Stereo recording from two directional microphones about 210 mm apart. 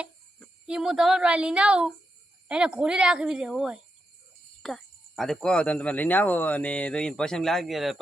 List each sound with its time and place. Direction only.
0.0 s speech: centre (ahead or behind)